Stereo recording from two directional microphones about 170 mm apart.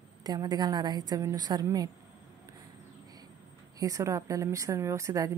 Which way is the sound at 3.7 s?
20° right (ahead or behind).